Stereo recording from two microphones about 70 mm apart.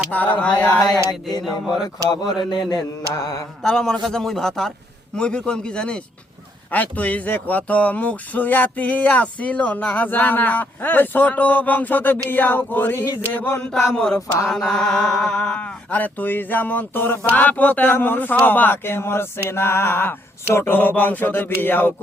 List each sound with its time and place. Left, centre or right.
0.1 s speech: left
0.7 s speech: left
2.0 s a sound: left
3.2 s speech: left
3.6 s a man's voice: centre; by 13.1 s left
13.7 s speech: centre
18.4 s a sound: left
20.5 s speech: left